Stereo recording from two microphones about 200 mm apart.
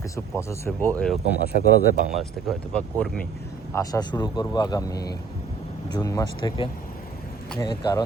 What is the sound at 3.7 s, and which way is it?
Speech, 20° left (ahead or behind).